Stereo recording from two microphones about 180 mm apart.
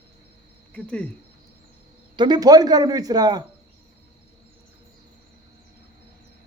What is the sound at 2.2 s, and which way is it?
Speech, 25° right (ahead or behind).